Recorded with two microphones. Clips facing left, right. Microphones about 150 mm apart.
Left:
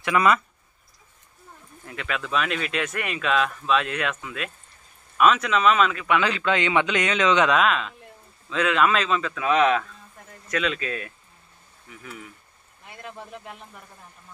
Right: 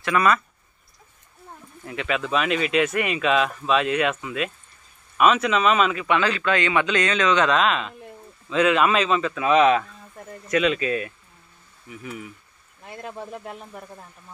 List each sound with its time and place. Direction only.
0.0 s a man's voice: 15° left (ahead or behind)
1.9 s speech: 5° right (ahead or behind)
6.1 s a man's voice: 15° left (ahead or behind)
7.5 s speech: centre (ahead or behind)
12.8 s speech: 40° right (ahead or behind)